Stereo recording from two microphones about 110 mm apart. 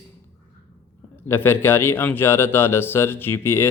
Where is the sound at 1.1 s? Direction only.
20° left (ahead or behind).